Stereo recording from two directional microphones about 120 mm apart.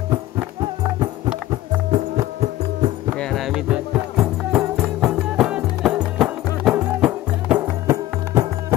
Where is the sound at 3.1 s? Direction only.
Centre (ahead or behind).